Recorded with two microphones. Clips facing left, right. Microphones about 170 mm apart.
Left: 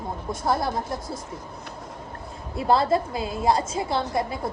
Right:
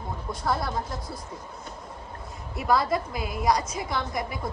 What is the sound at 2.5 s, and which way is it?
A woman's voice, 30° left (ahead or behind).